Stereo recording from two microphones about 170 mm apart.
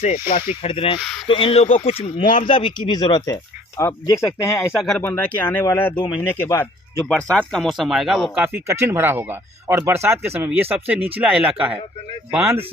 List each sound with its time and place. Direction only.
0.0 s speech: 40° left (ahead or behind)
0.9 s speech: centre (ahead or behind)
1.3 s speech: 30° left (ahead or behind); by 4.7 s 15° left (ahead or behind)
4.8 s speech: 5° left (ahead or behind)
8.5 s speech: 15° right (ahead or behind)